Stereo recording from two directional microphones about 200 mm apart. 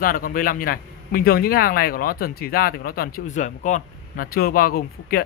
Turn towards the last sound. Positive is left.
turn(degrees=50)  # may be behind; listen again after turning